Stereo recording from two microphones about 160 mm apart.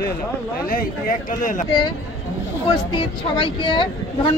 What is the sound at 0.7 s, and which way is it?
Speech, 65° left (ahead or behind).